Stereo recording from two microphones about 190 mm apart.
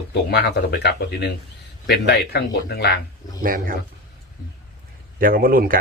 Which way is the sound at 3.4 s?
50° right (ahead or behind).